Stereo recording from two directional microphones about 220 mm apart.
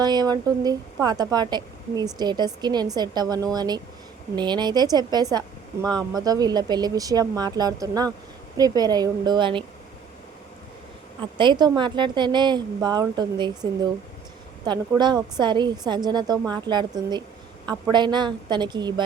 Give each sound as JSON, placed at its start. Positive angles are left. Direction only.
{"t": 0.0, "sound": "a woman's voice", "side_deg": -20}
{"t": 11.2, "sound": "a woman's voice", "side_deg": -20}